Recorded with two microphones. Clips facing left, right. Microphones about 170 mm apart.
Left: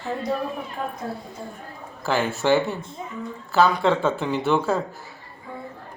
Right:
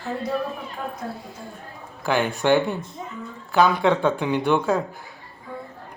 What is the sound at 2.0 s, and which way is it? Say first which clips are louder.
Speech: right 1 dB; centre (ahead or behind).